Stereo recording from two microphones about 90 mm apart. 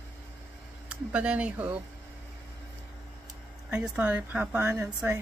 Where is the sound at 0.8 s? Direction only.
15° right (ahead or behind).